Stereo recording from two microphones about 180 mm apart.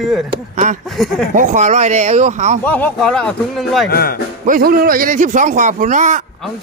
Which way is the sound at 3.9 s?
55° left (ahead or behind).